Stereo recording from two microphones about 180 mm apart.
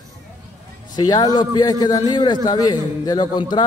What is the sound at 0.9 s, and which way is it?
A man's voice, 20° left (ahead or behind).